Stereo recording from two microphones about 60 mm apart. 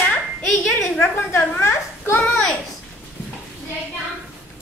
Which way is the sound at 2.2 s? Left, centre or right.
Centre.